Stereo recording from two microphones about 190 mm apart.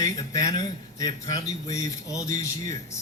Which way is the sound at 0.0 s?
20° left (ahead or behind).